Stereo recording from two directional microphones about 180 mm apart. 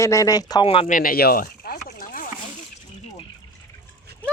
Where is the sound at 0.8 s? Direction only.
50° left (ahead or behind).